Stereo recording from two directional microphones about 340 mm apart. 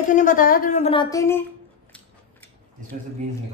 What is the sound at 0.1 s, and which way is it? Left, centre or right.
A woman's voice, left.